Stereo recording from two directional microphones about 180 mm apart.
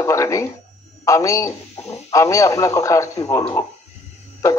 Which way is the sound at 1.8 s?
35° left (ahead or behind).